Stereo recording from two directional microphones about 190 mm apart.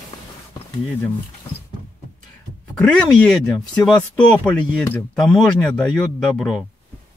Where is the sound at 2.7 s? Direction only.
5° left (ahead or behind).